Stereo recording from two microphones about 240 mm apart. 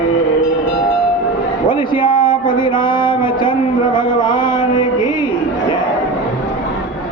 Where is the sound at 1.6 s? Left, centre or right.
Left.